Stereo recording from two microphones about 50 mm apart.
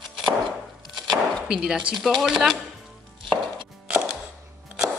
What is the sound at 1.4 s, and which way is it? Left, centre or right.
Speech, centre.